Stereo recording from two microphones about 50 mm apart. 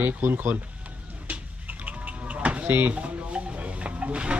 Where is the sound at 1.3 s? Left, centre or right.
Right.